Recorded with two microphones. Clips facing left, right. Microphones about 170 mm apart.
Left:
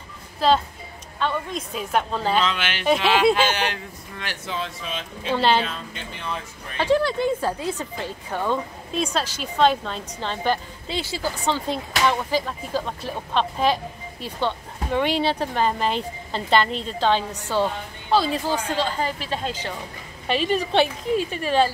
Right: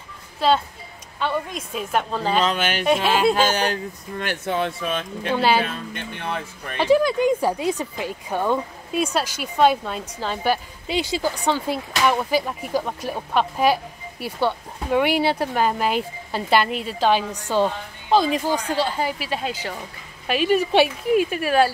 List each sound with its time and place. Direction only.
0.4 s a woman's voice: centre (ahead or behind)
2.4 s speech: 40° right (ahead or behind); by 5.3 s 55° right (ahead or behind)
5.3 s speech: 10° right (ahead or behind)
5.6 s speech: 55° right (ahead or behind)
6.8 s speech: 10° right (ahead or behind)